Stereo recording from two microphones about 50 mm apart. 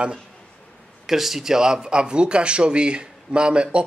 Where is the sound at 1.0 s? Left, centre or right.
Centre.